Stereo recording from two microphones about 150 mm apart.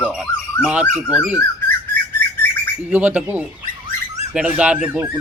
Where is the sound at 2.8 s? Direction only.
10° right (ahead or behind).